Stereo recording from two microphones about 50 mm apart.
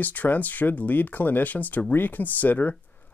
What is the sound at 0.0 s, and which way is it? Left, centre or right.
Speech, left.